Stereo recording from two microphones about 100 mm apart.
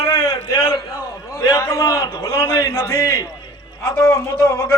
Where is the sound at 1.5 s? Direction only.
30° left (ahead or behind).